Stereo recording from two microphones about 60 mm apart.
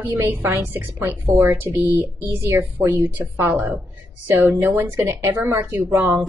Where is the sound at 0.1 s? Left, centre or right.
Right.